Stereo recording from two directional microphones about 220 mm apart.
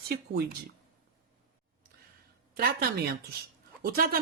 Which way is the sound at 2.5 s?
45° right (ahead or behind).